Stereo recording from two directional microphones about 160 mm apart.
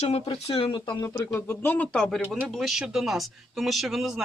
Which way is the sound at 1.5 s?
15° left (ahead or behind).